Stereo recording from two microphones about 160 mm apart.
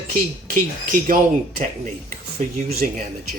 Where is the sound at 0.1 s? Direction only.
60° right (ahead or behind).